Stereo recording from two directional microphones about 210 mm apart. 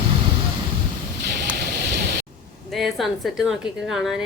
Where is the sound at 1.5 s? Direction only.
50° right (ahead or behind).